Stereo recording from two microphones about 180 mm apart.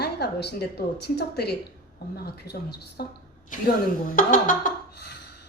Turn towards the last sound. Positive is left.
turn(degrees=55)  # may be behind; listen again after turning